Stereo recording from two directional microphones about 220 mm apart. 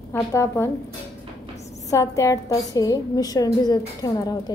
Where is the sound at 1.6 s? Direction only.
30° left (ahead or behind).